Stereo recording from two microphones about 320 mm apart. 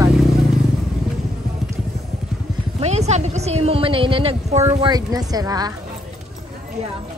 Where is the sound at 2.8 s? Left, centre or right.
Right.